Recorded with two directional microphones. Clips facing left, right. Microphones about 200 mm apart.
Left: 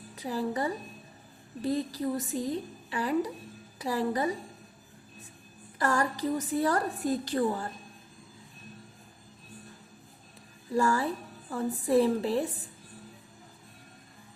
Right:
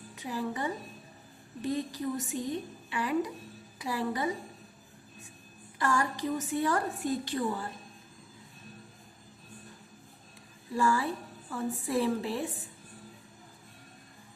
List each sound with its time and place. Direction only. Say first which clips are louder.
0.2 s a woman's voice: left 3 dB; 35° left (ahead or behind)
5.8 s a woman's voice: left 2 dB; 40° left (ahead or behind)
10.8 s a woman's voice: left 2 dB; 40° left (ahead or behind)